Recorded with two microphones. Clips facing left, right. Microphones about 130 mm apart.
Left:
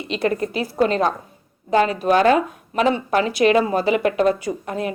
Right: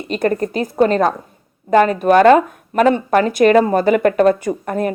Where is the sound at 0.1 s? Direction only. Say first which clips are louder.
Right 4 dB; 45° right (ahead or behind).